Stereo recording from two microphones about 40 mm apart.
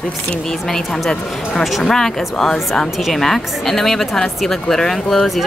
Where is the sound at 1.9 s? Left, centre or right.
Centre.